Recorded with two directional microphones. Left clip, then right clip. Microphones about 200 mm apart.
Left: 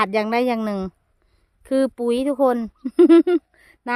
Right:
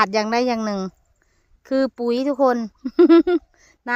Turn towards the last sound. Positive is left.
turn(degrees=5)  # may be behind; listen again after turning